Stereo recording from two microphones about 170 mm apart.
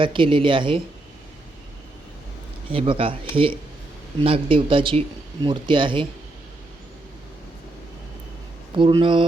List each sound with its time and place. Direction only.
0.0 s speech: 30° right (ahead or behind)
2.7 s speech: 30° right (ahead or behind)
8.7 s speech: 30° right (ahead or behind)